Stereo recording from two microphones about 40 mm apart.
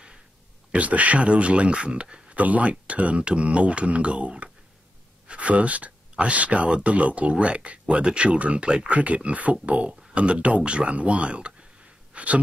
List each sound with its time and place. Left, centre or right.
0.7 s speech: right
2.3 s speech: right
12.1 s gasp: right